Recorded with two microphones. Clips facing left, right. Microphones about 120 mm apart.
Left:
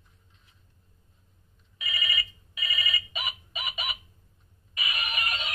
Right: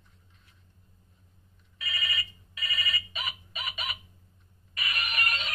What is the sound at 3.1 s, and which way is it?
Chicken, 15° left (ahead or behind).